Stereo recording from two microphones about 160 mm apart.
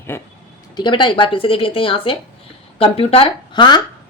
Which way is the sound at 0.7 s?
30° left (ahead or behind).